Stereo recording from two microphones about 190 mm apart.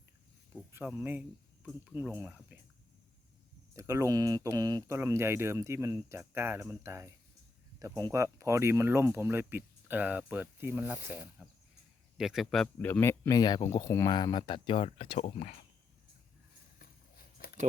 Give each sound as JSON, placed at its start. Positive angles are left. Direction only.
{"t": 0.5, "sound": "speech", "side_deg": -10}
{"t": 3.8, "sound": "speech", "side_deg": -15}
{"t": 16.7, "sound": "a sound", "side_deg": 50}